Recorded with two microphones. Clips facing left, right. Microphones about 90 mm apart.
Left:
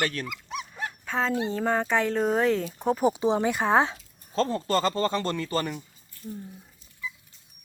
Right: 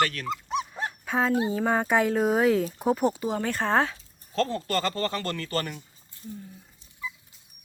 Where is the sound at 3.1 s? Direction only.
20° left (ahead or behind).